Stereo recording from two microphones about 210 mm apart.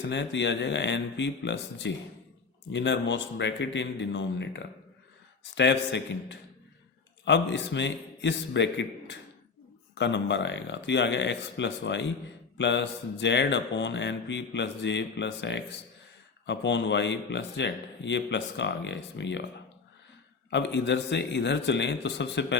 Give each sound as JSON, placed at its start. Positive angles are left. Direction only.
{"t": 0.0, "sound": "speech", "side_deg": 55}
{"t": 20.5, "sound": "speech", "side_deg": 55}